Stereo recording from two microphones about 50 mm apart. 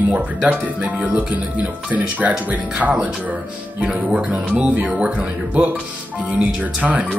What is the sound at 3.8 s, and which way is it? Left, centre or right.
Speech, centre.